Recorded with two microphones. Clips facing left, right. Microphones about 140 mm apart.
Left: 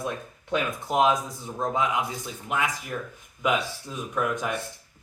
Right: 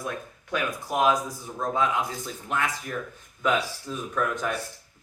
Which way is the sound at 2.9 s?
15° left (ahead or behind).